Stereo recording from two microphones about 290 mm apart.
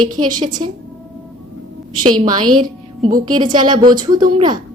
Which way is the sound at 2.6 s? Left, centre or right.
Centre.